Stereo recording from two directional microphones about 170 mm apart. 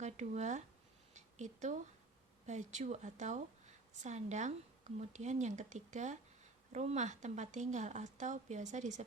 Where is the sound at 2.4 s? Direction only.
45° right (ahead or behind).